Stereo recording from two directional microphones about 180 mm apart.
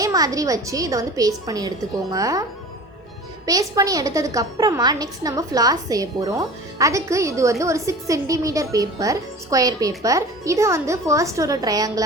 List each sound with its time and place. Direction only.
0.0 s a woman's voice: 20° right (ahead or behind)
3.4 s a woman's voice: 20° right (ahead or behind)